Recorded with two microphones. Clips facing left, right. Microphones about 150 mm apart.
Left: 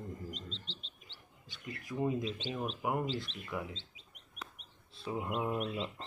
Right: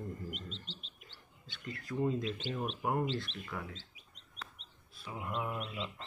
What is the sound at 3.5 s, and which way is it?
Speech, 20° left (ahead or behind).